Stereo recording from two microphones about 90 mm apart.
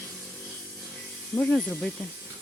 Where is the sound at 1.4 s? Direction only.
15° left (ahead or behind).